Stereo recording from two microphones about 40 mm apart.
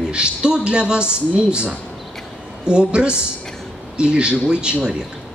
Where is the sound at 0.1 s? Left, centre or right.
Right.